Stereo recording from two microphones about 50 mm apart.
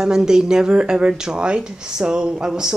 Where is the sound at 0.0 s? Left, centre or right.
Centre.